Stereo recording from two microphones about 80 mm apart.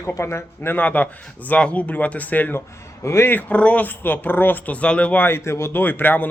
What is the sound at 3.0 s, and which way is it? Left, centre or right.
Speech, left.